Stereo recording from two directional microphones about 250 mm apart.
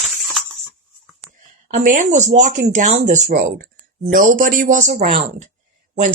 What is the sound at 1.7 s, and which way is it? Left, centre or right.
Speech, right.